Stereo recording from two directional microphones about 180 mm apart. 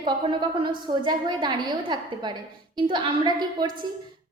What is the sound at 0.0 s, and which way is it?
A woman's voice, 25° right (ahead or behind).